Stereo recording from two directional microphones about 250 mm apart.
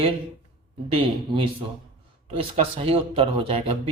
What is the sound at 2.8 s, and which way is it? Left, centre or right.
Speech, right.